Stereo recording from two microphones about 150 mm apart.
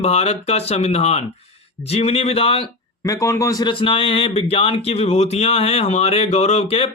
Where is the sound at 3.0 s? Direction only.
20° left (ahead or behind).